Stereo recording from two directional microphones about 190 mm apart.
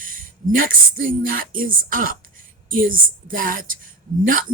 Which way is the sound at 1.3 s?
50° right (ahead or behind).